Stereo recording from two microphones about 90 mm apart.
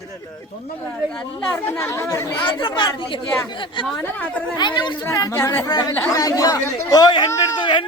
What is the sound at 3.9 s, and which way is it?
Speech, 10° left (ahead or behind).